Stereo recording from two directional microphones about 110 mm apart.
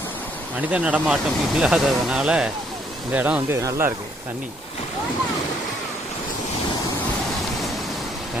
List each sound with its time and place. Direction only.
0.7 s speech: 10° right (ahead or behind)
3.6 s speech: 25° right (ahead or behind)